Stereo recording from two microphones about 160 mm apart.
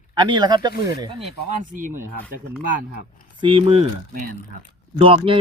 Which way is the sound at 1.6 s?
55° right (ahead or behind).